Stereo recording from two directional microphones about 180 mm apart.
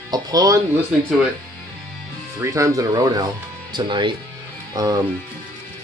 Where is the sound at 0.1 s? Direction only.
20° right (ahead or behind).